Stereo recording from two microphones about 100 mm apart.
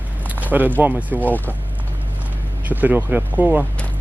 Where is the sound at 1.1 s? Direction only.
15° left (ahead or behind).